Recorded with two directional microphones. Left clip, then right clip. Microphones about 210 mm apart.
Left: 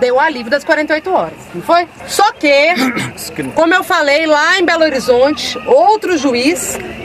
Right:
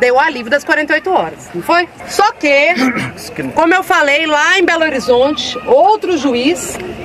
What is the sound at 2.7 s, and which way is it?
Speech, 10° left (ahead or behind).